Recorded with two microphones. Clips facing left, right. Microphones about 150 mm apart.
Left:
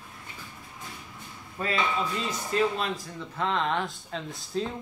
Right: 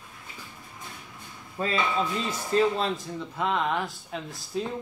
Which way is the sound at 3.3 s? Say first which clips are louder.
Even; 10° right (ahead or behind).